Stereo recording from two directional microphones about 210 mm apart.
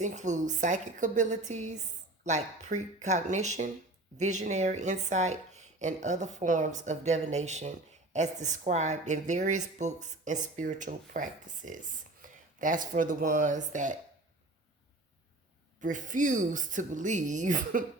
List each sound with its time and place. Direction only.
0.0 s speech: 35° right (ahead or behind)
15.8 s speech: 40° right (ahead or behind)